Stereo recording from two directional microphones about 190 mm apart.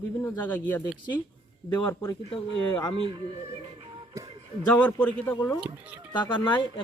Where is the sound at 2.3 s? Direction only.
25° left (ahead or behind).